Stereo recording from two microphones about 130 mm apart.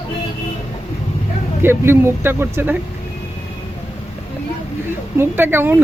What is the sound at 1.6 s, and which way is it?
A woman's voice, 20° right (ahead or behind).